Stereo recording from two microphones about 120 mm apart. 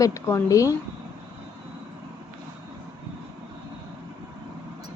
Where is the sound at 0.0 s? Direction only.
25° left (ahead or behind).